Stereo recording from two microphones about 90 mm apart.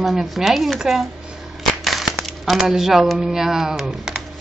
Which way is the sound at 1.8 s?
Centre (ahead or behind).